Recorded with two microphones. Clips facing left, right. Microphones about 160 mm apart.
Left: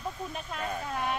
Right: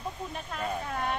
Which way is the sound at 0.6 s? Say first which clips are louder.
Right 1 dB; centre (ahead or behind).